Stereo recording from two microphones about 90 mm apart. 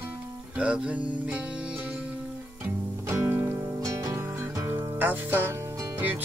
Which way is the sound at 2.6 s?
25° right (ahead or behind).